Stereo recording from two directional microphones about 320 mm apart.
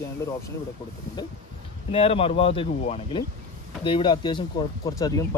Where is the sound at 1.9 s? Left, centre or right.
Centre.